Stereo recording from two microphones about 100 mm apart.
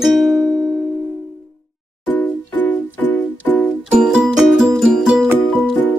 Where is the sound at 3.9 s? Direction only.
5° right (ahead or behind).